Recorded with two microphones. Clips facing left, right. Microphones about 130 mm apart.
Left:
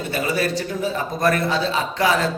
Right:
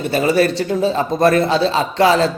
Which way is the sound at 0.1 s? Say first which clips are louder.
Right 7 dB; 30° right (ahead or behind).